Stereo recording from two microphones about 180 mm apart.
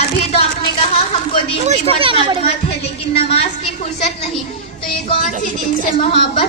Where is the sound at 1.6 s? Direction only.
35° right (ahead or behind).